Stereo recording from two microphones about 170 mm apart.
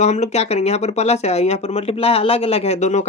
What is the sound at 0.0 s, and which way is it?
Speech, 40° left (ahead or behind).